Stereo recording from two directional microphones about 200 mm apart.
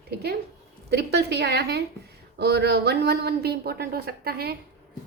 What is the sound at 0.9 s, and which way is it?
A woman's voice, 55° right (ahead or behind).